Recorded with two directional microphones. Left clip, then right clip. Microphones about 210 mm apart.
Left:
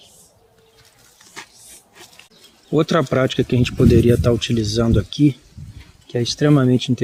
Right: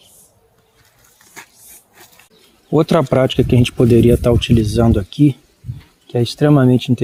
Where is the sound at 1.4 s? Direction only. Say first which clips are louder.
Left 1 dB; centre (ahead or behind).